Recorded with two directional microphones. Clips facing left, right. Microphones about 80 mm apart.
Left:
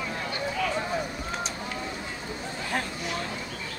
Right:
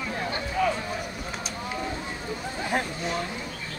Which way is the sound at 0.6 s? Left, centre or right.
Right.